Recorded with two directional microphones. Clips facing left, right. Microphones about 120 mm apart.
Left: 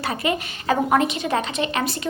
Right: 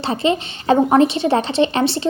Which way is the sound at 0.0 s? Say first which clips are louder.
Right 5 dB; 25° right (ahead or behind).